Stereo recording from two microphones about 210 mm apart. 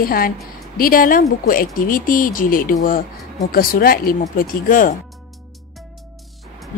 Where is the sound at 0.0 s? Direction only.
45° left (ahead or behind).